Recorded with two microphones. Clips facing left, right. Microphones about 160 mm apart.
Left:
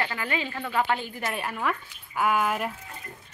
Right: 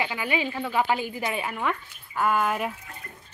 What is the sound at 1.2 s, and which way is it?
Speech, centre (ahead or behind).